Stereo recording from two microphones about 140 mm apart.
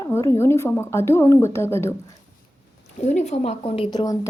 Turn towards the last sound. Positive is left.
turn(degrees=40)  # may be behind; listen again after turning